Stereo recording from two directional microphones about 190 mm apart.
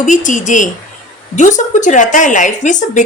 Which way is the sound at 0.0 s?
40° left (ahead or behind).